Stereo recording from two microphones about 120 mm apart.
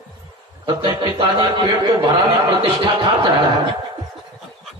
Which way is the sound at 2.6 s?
40° right (ahead or behind).